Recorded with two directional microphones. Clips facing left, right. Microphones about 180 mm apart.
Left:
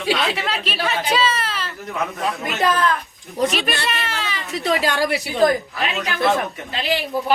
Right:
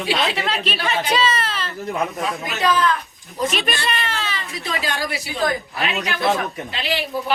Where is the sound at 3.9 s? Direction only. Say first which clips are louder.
Right 1 dB; 10° left (ahead or behind).